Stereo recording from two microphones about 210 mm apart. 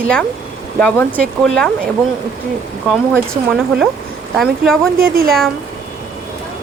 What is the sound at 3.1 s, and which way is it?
Speech, 5° left (ahead or behind).